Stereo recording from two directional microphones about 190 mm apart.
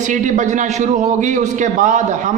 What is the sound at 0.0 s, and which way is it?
A man's voice, 40° right (ahead or behind).